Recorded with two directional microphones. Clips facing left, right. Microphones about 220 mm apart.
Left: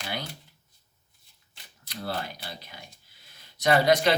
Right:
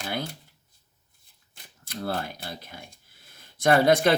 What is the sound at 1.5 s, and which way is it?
Speech, 50° right (ahead or behind).